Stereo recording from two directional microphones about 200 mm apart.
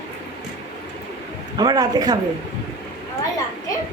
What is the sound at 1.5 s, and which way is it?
Speech, 20° right (ahead or behind).